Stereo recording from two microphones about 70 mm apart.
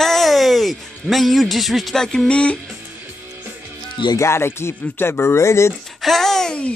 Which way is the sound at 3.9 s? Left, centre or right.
Left.